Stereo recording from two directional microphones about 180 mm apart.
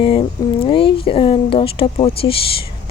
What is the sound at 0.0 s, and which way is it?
A woman's voice, 30° left (ahead or behind).